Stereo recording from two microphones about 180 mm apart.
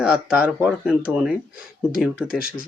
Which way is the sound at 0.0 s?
5° right (ahead or behind).